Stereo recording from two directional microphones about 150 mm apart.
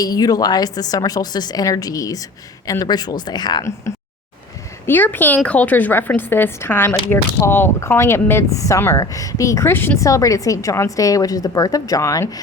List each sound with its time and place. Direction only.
0.0 s speech: 25° left (ahead or behind)
4.9 s a woman's voice: 15° left (ahead or behind)